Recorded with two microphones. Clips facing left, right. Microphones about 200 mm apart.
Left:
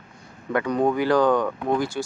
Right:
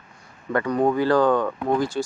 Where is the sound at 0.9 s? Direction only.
15° left (ahead or behind).